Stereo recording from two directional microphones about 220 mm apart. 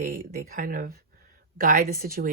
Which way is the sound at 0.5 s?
40° right (ahead or behind).